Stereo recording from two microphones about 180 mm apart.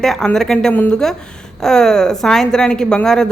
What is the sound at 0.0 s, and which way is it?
Speech, centre (ahead or behind).